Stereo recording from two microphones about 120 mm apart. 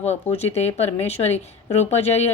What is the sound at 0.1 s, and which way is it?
Speech, 60° left (ahead or behind).